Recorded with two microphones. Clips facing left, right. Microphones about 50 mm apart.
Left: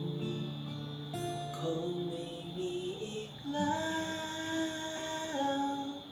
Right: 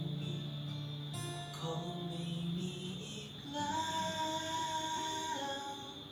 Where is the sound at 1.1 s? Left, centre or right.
Left.